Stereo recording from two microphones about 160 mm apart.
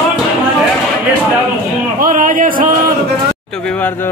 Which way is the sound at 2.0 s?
60° right (ahead or behind).